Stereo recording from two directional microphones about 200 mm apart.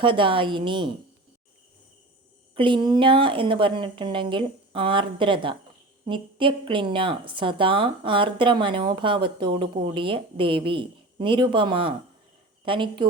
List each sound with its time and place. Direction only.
0.0 s a woman's voice: 25° right (ahead or behind)
2.6 s a woman's voice: 25° right (ahead or behind)